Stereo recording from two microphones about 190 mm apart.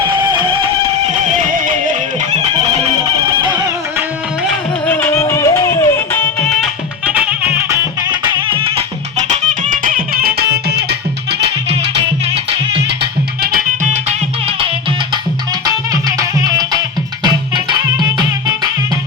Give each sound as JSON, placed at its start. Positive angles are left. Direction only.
{"t": 0.1, "sound": "music", "side_deg": -25}
{"t": 1.5, "sound": "music", "side_deg": -45}
{"t": 3.4, "sound": "music", "side_deg": -20}
{"t": 4.9, "sound": "music", "side_deg": 10}
{"t": 6.6, "sound": "music", "side_deg": -5}
{"t": 8.1, "sound": "music", "side_deg": -25}
{"t": 9.6, "sound": "music", "side_deg": -45}
{"t": 13.4, "sound": "music", "side_deg": -50}
{"t": 14.1, "sound": "music", "side_deg": -30}
{"t": 15.6, "sound": "music", "side_deg": -20}